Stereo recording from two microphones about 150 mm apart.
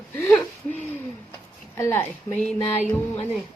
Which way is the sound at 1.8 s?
15° left (ahead or behind).